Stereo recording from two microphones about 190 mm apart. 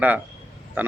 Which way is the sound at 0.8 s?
10° right (ahead or behind).